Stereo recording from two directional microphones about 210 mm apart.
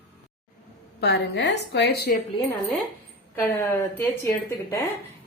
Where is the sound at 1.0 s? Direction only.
55° left (ahead or behind).